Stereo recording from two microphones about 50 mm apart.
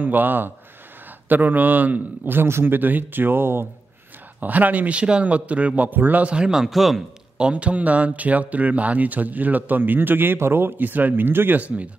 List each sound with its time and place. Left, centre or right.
0.0 s speech: right
2.4 s speech: right
4.4 s speech: right
5.9 s speech: right
6.2 s speech: centre
7.3 s speech: right
11.6 s speech: right